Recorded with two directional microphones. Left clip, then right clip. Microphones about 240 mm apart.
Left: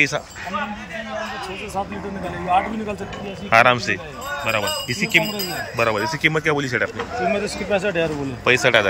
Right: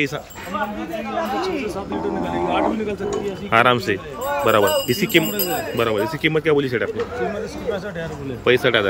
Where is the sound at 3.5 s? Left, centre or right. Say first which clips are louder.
Left 1 dB; centre.